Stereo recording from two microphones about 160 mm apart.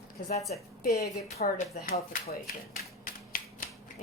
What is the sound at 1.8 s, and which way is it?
Speech, 50° left (ahead or behind).